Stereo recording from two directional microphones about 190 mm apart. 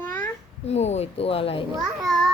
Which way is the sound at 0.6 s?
35° left (ahead or behind).